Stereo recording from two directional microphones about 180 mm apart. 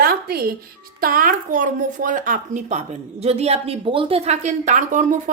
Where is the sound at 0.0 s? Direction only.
60° right (ahead or behind).